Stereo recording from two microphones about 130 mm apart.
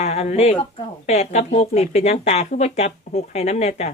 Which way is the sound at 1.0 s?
55° left (ahead or behind).